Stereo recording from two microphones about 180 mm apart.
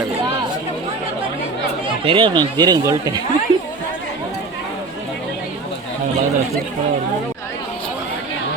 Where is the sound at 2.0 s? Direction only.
25° right (ahead or behind).